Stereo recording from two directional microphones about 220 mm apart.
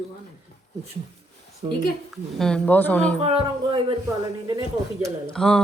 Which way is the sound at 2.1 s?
Centre (ahead or behind).